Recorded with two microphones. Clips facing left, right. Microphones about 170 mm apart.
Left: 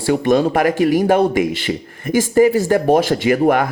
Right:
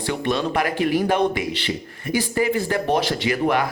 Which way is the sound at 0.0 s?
45° left (ahead or behind).